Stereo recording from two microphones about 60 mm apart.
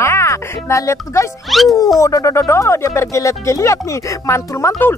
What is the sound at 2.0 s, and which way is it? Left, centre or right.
Speech, left.